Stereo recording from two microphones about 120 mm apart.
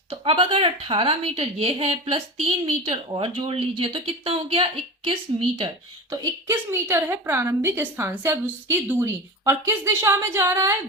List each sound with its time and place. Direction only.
0.1 s speech: 50° right (ahead or behind)
6.1 s a woman's voice: 25° right (ahead or behind)